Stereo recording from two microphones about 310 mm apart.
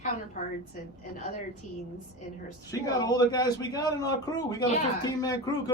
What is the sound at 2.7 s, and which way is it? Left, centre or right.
A man's voice, centre.